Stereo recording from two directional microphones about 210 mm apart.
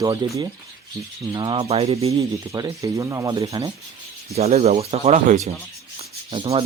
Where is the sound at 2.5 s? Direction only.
15° right (ahead or behind).